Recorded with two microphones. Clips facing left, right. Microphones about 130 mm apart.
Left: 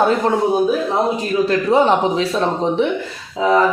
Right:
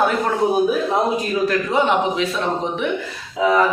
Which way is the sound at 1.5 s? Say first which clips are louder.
Left 6 dB; 35° left (ahead or behind).